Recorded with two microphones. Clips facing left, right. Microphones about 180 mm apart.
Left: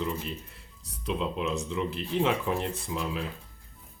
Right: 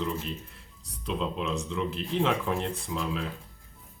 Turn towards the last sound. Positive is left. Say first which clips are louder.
# right 1 dB
turn(degrees=0)  # may be behind; listen again after turning